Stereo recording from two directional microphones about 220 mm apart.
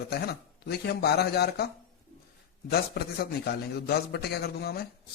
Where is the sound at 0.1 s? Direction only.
45° left (ahead or behind).